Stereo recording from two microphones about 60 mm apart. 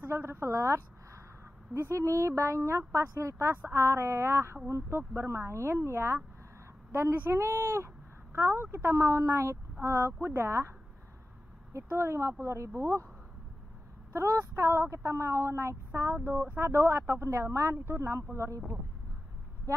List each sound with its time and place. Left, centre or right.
0.1 s a woman's voice: right
8.9 s speech: right
11.7 s speech: right
14.1 s speech: right